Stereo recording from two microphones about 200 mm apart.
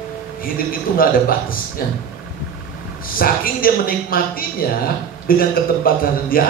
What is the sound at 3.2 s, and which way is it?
A woman's voice, 45° left (ahead or behind).